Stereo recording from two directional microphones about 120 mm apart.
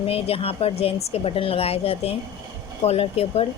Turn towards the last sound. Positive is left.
turn(degrees=55)  # may be behind; listen again after turning